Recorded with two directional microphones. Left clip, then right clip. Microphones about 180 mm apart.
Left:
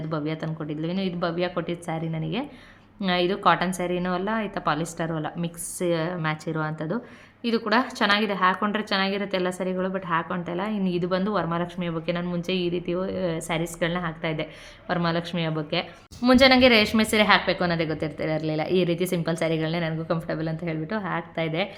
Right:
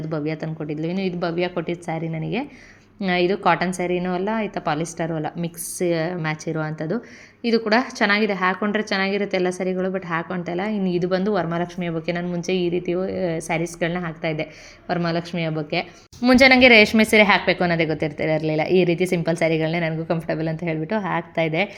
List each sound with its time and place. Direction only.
0.1 s a woman's voice: 10° right (ahead or behind)